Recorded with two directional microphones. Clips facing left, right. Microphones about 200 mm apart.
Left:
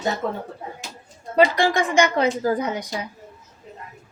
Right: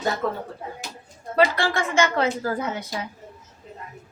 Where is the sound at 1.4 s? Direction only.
15° left (ahead or behind).